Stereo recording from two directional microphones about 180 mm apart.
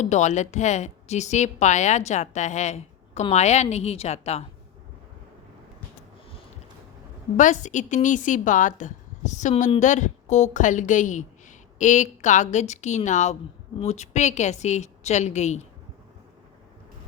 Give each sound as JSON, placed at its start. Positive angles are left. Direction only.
{"t": 0.0, "sound": "a woman's voice", "side_deg": 40}
{"t": 7.3, "sound": "a woman's voice", "side_deg": 45}